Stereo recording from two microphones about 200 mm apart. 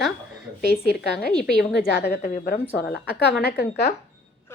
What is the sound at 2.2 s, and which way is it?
Speech, 45° left (ahead or behind).